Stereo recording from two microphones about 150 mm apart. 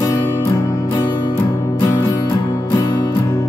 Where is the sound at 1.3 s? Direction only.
15° left (ahead or behind).